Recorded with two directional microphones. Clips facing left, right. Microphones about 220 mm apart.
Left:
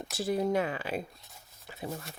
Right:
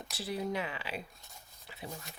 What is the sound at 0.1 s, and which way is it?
Speech, 45° left (ahead or behind).